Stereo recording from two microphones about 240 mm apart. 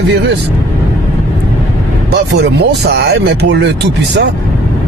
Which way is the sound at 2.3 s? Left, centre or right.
Right.